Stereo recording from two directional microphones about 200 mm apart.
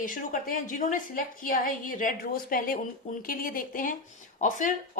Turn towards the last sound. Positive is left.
turn(degrees=40)  # may be behind; listen again after turning